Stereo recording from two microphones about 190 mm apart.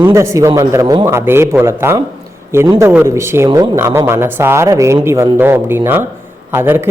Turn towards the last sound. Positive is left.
turn(degrees=-10)  # may be behind; listen again after turning